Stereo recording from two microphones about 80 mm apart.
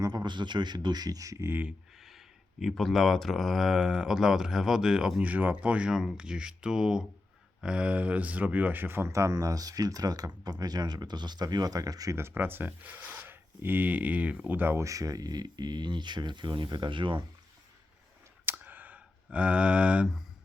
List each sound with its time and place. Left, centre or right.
0.0 s speech: right
1.5 s speech: right
2.0 s speech: centre
5.2 s speech: centre; by 12.1 s right
12.1 s speech: right
14.8 s speech: right
18.4 s a sound: right